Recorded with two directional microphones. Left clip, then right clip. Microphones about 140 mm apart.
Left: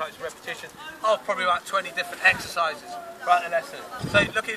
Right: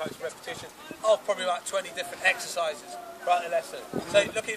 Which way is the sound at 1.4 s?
75° right (ahead or behind).